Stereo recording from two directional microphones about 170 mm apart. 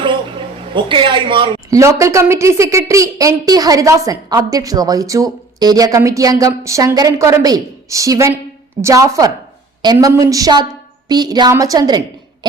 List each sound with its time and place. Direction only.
0.7 s a woman's voice: 30° right (ahead or behind)
1.8 s a woman's voice: 15° right (ahead or behind)